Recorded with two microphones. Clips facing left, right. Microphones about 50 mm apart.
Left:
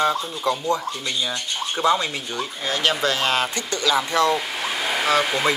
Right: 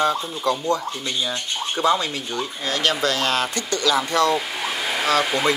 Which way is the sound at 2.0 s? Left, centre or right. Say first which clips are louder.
Right 1 dB; centre.